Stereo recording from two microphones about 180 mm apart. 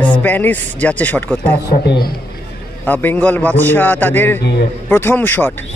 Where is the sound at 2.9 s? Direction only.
10° left (ahead or behind).